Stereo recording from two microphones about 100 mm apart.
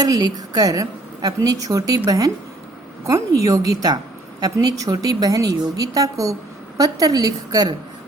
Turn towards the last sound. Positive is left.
turn(degrees=-40)  # may be behind; listen again after turning